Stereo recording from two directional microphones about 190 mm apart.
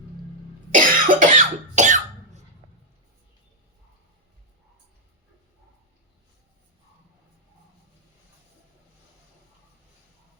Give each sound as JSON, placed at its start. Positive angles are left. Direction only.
{"t": 0.7, "sound": "cough", "side_deg": -45}